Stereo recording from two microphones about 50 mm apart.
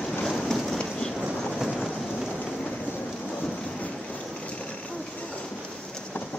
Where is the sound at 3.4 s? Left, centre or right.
Centre.